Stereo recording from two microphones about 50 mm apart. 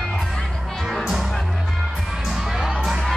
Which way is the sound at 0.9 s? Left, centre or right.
Centre.